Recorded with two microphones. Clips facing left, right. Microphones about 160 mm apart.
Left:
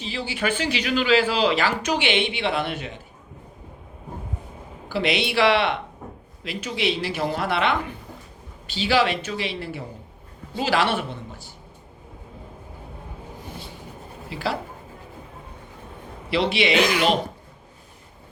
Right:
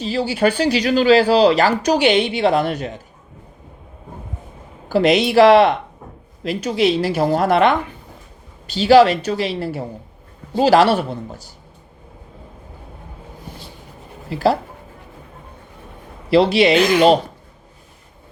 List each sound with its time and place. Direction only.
0.0 s speech: 40° right (ahead or behind)
4.9 s speech: 40° right (ahead or behind)
14.3 s speech: 40° right (ahead or behind)
16.3 s speech: 40° right (ahead or behind)